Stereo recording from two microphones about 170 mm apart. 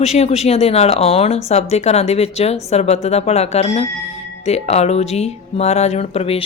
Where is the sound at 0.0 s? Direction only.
40° left (ahead or behind).